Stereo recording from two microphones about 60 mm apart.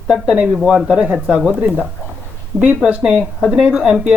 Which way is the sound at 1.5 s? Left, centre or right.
Right.